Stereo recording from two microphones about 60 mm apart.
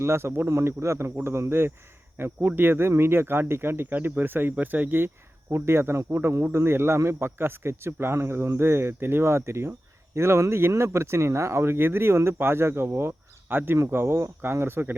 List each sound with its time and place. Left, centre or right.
0.0 s speech: right
3.8 s speech: right